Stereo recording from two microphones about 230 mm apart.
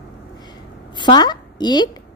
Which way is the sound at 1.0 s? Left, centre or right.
Centre.